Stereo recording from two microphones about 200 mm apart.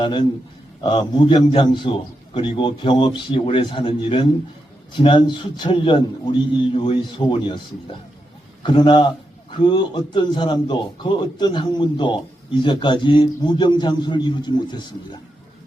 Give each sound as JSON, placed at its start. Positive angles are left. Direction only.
{"t": 0.0, "sound": "a man's voice", "side_deg": 20}
{"t": 8.6, "sound": "a man's voice", "side_deg": 20}